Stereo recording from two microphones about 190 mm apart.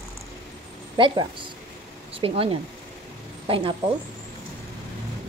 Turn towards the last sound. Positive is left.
turn(degrees=-30)  # may be behind; listen again after turning